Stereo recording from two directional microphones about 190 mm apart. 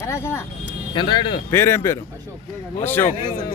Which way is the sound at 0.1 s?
15° left (ahead or behind).